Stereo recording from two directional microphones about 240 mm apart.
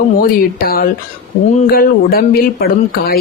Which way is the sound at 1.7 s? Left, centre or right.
Left.